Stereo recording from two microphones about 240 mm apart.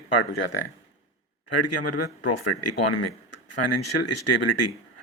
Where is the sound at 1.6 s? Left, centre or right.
Left.